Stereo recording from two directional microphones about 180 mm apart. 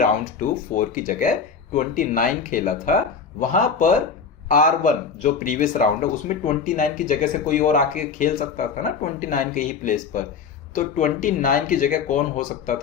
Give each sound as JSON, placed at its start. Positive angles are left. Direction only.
{"t": 0.0, "sound": "speech", "side_deg": 45}